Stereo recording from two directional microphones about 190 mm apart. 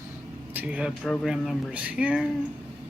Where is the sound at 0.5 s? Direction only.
5° right (ahead or behind).